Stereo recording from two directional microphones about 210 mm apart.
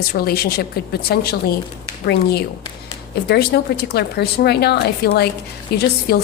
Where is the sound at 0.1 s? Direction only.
45° left (ahead or behind).